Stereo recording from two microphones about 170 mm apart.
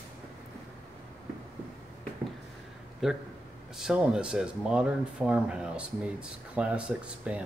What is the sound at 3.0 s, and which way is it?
Speech, 5° right (ahead or behind).